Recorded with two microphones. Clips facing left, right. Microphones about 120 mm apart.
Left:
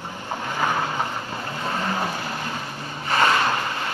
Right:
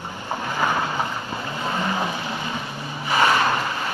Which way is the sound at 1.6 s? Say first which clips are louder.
Right 1 dB; 10° right (ahead or behind).